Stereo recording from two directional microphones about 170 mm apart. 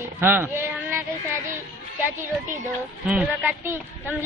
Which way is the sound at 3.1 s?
10° right (ahead or behind).